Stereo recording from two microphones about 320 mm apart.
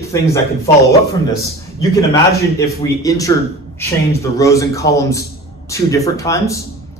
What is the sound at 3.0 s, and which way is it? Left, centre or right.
A man's voice, centre.